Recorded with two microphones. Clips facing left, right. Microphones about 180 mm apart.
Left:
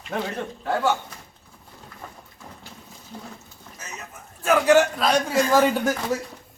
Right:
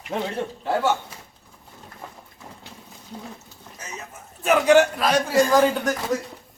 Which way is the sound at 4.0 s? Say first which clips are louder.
Right 2 dB; 20° right (ahead or behind).